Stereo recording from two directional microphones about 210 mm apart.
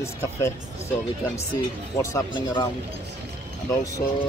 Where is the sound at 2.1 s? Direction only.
20° left (ahead or behind).